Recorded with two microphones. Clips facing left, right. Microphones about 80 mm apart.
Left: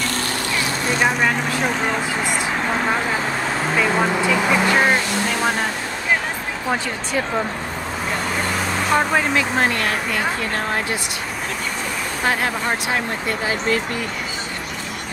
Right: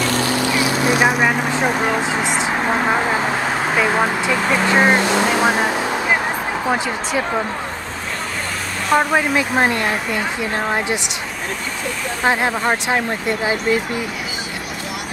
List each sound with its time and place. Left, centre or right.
0.2 s vehicle: centre
1.5 s speech: centre
5.2 s music: centre
8.9 s speech: centre
12.3 s speech: right